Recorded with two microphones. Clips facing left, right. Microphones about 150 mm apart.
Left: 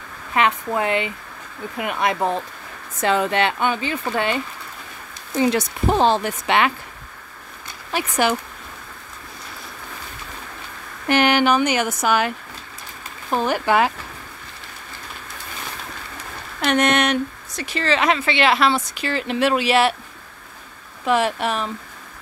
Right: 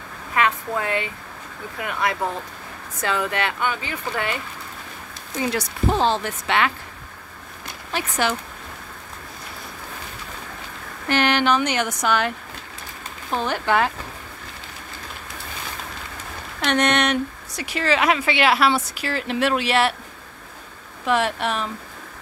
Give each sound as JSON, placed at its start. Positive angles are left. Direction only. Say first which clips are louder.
{"t": 0.3, "sound": "a woman's voice", "louder": "left 2 dB", "side_deg": 20}
{"t": 5.5, "sound": "speech", "louder": "left 3 dB", "side_deg": 20}
{"t": 7.9, "sound": "speech", "louder": "left 3 dB", "side_deg": 15}
{"t": 11.1, "sound": "speech", "louder": "left 3 dB", "side_deg": 15}
{"t": 13.3, "sound": "speech", "louder": "left 3 dB", "side_deg": 10}
{"t": 16.6, "sound": "speech", "louder": "left 2 dB", "side_deg": 5}
{"t": 17.6, "sound": "speech", "louder": "even", "side_deg": -10}
{"t": 21.0, "sound": "speech", "louder": "left 2 dB", "side_deg": 0}